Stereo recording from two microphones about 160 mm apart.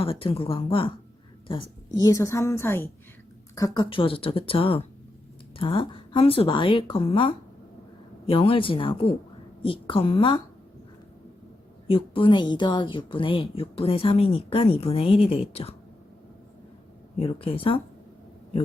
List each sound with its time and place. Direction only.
0.0 s a woman's voice: 35° left (ahead or behind)
2.0 s a woman's voice: 20° left (ahead or behind)
3.8 s a woman's voice: 35° left (ahead or behind)
11.9 s a woman's voice: 35° left (ahead or behind)
17.2 s a woman's voice: 35° left (ahead or behind)